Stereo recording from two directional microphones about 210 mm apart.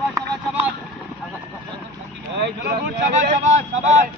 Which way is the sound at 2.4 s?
45° right (ahead or behind).